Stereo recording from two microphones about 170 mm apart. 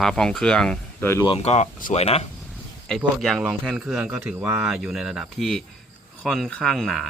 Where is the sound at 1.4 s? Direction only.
40° left (ahead or behind).